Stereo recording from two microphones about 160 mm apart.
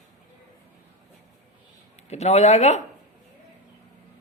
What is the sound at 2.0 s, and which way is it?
Speech, 45° left (ahead or behind).